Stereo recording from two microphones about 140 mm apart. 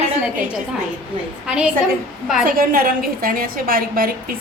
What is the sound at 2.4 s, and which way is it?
A woman's voice, 90° right.